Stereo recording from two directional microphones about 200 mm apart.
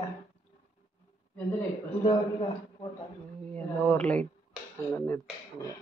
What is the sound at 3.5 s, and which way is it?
A man's voice, 5° left (ahead or behind).